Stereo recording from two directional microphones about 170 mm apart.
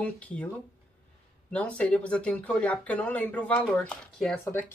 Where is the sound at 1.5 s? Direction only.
5° left (ahead or behind).